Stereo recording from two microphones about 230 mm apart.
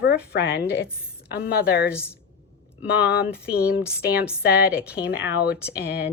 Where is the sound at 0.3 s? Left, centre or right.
Left.